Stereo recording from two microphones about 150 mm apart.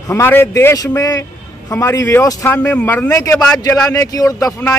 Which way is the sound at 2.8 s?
10° left (ahead or behind).